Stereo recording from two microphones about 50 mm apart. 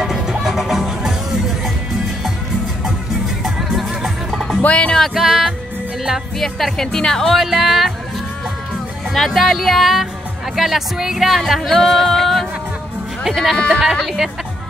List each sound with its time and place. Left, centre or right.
0.0 s music: centre
3.4 s music: centre
4.6 s speech: left
5.1 s music: centre
6.3 s speech: centre
7.3 s speech: centre
9.1 s speech: centre
13.8 s speech: centre